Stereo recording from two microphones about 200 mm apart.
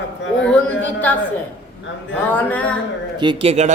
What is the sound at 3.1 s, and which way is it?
Speech, 25° right (ahead or behind).